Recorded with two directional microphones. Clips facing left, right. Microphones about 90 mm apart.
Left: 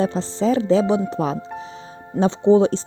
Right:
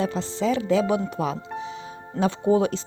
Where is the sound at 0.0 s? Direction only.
35° left (ahead or behind).